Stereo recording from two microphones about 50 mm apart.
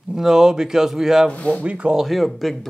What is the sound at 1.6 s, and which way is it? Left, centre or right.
Speech, right.